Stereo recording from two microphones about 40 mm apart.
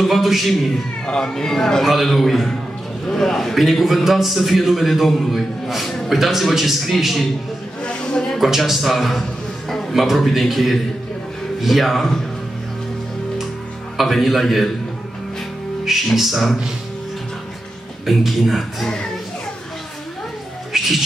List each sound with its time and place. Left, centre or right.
0.0 s a man's voice: centre
1.0 s speech: centre
1.9 s a man's voice: centre
7.8 s a sound: left
8.4 s a man's voice: centre
13.9 s a man's voice: centre
15.8 s a man's voice: centre
18.0 s a man's voice: centre
20.7 s music: centre